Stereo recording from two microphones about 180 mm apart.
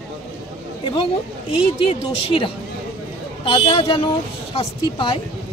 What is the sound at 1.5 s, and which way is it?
Speech, 30° left (ahead or behind).